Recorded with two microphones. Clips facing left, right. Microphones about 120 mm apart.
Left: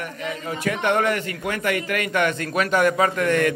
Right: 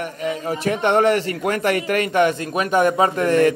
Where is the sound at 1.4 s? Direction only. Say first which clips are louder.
Right 4 dB; 40° right (ahead or behind).